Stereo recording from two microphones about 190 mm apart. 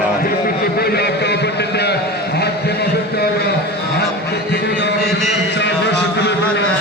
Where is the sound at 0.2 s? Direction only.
50° left (ahead or behind).